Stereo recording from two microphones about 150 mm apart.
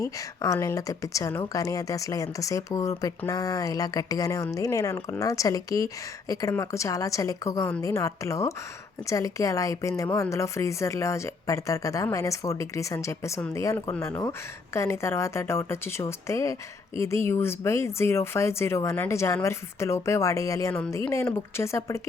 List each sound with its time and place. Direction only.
0.0 s speech: 20° left (ahead or behind)